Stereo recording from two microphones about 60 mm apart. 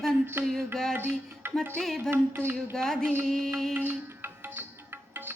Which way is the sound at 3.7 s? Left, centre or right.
Right.